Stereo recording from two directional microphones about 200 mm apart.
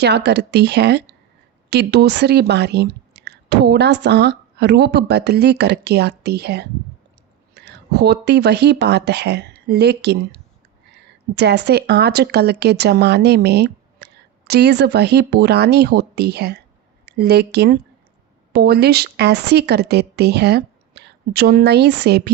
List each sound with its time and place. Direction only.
0.0 s speech: 60° right (ahead or behind)